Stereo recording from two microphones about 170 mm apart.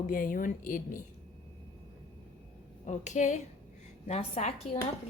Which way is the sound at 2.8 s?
45° left (ahead or behind).